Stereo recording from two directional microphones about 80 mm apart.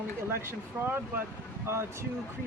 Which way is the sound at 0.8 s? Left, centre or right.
Right.